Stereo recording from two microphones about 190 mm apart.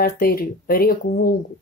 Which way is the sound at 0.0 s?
50° left (ahead or behind).